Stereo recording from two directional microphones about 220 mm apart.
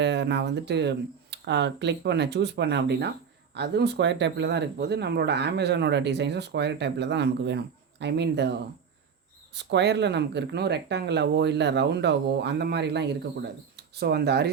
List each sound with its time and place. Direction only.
0.0 s speech: 50° right (ahead or behind)
9.6 s speech: 50° right (ahead or behind)